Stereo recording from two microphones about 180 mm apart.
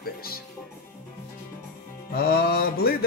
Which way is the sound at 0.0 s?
55° left (ahead or behind).